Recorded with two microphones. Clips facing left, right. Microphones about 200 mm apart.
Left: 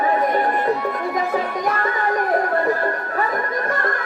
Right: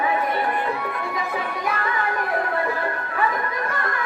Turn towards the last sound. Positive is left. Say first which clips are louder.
# left 4 dB
turn(degrees=40)  # may be behind; listen again after turning